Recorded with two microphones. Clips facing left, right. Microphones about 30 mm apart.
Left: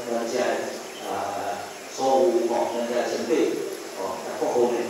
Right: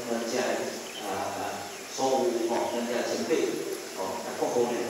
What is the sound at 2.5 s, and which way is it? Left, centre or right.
Mantra, centre.